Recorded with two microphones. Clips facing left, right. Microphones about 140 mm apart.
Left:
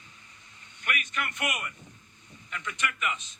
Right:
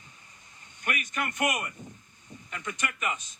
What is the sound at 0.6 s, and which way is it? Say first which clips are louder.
A man's voice: right 1 dB; 35° right (ahead or behind).